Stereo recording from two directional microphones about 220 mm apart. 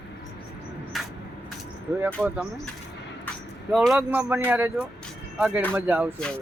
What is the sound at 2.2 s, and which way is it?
Speech, 10° right (ahead or behind).